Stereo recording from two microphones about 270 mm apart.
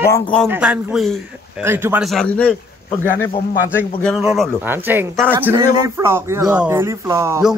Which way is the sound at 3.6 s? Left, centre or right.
Centre.